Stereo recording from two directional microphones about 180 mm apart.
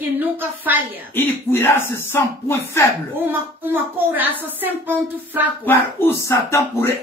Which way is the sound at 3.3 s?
10° right (ahead or behind).